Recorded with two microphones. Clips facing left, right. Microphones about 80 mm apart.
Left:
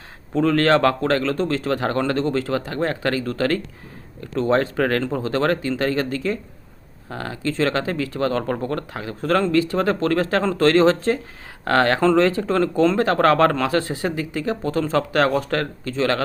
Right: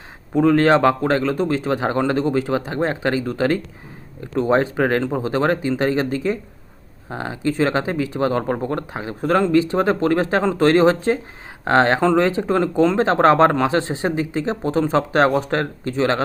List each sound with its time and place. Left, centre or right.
0.3 s a man's voice: centre